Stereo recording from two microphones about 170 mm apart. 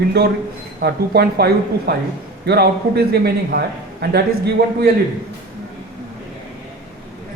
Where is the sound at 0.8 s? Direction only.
70° right (ahead or behind).